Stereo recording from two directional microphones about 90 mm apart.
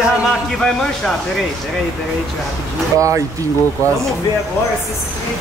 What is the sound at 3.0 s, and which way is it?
Speech, 35° right (ahead or behind).